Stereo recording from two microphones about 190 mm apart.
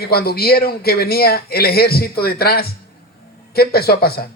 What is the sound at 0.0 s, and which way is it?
A man's voice, 55° left (ahead or behind).